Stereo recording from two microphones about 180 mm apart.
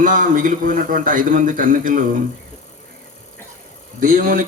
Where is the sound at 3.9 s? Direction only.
50° right (ahead or behind).